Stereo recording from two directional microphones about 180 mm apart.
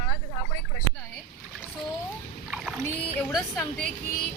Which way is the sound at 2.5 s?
Centre (ahead or behind).